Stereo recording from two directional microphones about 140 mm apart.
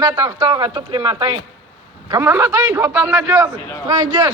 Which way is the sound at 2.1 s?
15° right (ahead or behind).